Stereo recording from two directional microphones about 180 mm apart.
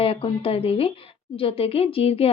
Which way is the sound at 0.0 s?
30° left (ahead or behind).